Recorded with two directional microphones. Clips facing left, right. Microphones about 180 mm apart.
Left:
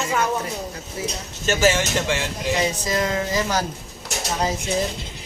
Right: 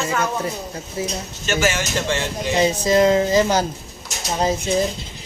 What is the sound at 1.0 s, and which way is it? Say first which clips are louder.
Speech: right 3 dB; 25° right (ahead or behind).